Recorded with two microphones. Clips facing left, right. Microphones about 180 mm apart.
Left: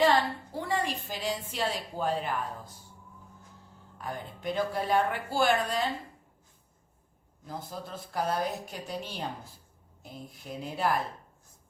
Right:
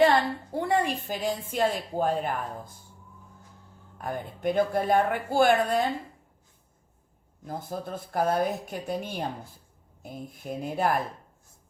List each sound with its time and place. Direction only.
0.5 s a woman's voice: 55° right (ahead or behind)
3.9 s a woman's voice: 50° right (ahead or behind)
7.4 s a woman's voice: 55° right (ahead or behind)